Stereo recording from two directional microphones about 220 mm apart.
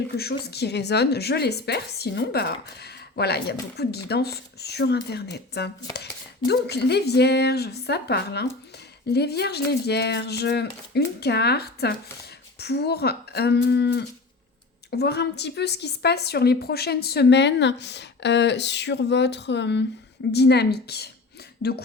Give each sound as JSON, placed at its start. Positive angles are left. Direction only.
{"t": 0.2, "sound": "a woman's voice", "side_deg": 45}